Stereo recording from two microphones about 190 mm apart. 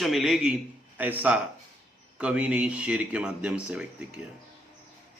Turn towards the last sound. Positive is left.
turn(degrees=-5)  # may be behind; listen again after turning